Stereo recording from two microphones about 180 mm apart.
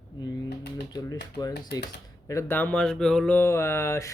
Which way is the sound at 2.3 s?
15° left (ahead or behind).